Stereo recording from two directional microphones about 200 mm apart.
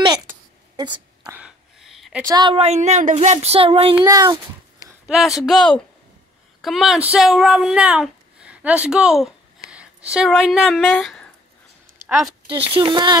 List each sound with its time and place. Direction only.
0.7 s a woman's voice: 20° right (ahead or behind)
1.2 s a sound: 5° right (ahead or behind)
2.2 s speech: 20° right (ahead or behind)
5.0 s a woman's voice: centre (ahead or behind)
12.6 s speech: 25° right (ahead or behind)